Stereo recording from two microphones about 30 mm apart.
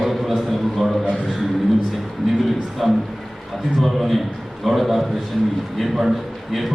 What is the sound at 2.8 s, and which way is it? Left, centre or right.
Speech, centre.